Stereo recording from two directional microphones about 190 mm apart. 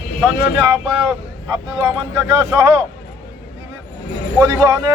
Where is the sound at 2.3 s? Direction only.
20° right (ahead or behind).